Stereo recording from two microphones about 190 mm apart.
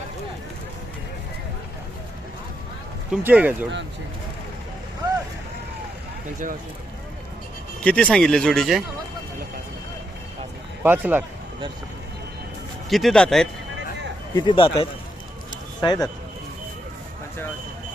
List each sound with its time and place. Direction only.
3.1 s speech: 10° right (ahead or behind)
7.8 s speech: 5° left (ahead or behind)
10.8 s speech: 10° right (ahead or behind)
12.9 s speech: centre (ahead or behind)
14.3 s speech: 25° left (ahead or behind)